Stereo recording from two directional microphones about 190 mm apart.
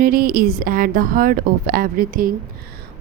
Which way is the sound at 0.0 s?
50° right (ahead or behind).